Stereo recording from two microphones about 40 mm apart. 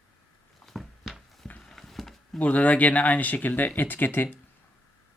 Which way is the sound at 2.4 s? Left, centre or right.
Left.